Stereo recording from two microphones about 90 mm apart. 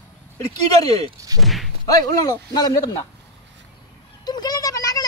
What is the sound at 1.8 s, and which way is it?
Speech, 45° left (ahead or behind).